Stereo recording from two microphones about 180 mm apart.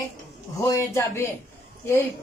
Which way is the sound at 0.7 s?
15° left (ahead or behind).